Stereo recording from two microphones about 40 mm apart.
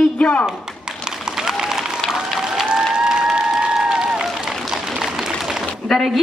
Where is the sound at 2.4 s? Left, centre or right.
Centre.